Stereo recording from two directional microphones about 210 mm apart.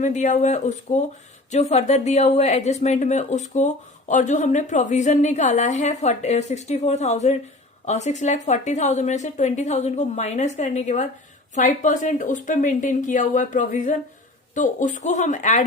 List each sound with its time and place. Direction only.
0.0 s a woman's voice: 35° left (ahead or behind)